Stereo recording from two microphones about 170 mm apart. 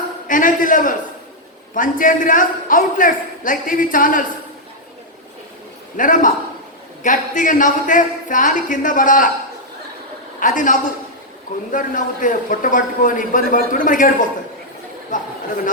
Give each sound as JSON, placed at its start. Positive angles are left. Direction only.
{"t": 0.3, "sound": "a man's voice", "side_deg": 50}
{"t": 6.0, "sound": "a man's voice", "side_deg": 50}
{"t": 10.4, "sound": "a man's voice", "side_deg": 50}